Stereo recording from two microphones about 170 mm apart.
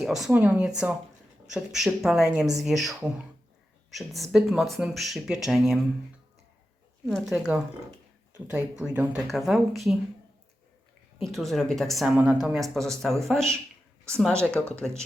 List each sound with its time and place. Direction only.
0.0 s speech: centre (ahead or behind)
7.0 s speech: centre (ahead or behind)
11.2 s speech: centre (ahead or behind)